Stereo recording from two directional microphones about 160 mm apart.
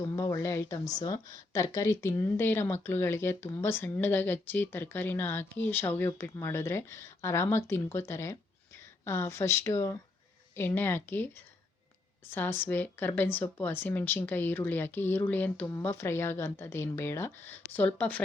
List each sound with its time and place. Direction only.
0.2 s a woman's voice: 20° left (ahead or behind)